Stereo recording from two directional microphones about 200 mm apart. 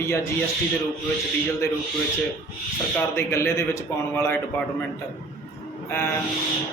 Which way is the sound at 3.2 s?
15° left (ahead or behind).